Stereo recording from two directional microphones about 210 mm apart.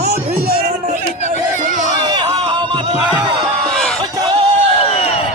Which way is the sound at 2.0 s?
20° right (ahead or behind).